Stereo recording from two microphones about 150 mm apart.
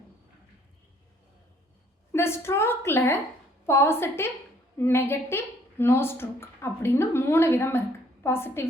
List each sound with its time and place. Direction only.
2.1 s a woman's voice: 15° left (ahead or behind)